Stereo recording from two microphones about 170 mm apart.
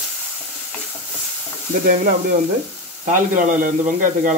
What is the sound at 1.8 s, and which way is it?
A man's voice, 50° right (ahead or behind).